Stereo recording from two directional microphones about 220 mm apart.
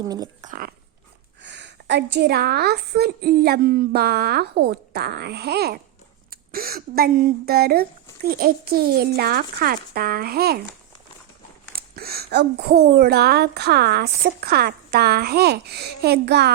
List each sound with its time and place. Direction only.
0.0 s speech: 20° right (ahead or behind)
0.4 s speech: 40° right (ahead or behind)
1.4 s a woman's voice: 55° right (ahead or behind)
11.7 s a woman's voice: 45° right (ahead or behind)